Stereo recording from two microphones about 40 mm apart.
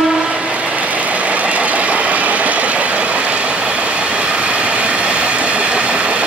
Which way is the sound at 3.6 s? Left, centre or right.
Right.